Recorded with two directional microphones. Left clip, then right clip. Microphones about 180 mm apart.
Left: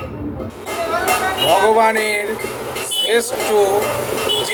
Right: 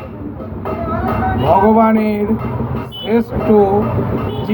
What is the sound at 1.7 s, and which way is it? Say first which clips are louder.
Speech: right 1 dB; 10° left (ahead or behind).